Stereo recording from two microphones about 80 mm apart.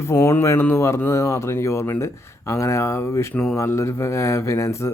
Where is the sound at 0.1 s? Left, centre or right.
Left.